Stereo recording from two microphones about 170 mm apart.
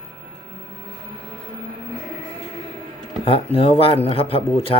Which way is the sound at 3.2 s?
35° left (ahead or behind).